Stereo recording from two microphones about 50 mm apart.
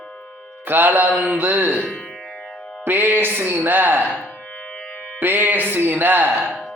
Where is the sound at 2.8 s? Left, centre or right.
Right.